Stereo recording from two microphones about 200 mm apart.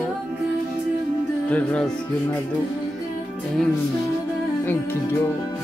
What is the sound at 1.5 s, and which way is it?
Music, 5° left (ahead or behind).